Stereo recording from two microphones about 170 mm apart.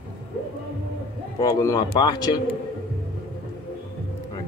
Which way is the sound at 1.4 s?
20° left (ahead or behind).